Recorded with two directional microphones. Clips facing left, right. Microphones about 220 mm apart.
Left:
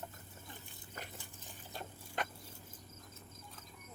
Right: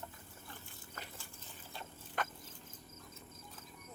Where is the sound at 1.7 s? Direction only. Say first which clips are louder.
Left 3 dB; 45° left (ahead or behind).